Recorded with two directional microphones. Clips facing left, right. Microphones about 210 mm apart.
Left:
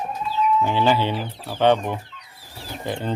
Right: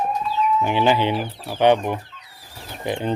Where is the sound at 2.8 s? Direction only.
15° right (ahead or behind).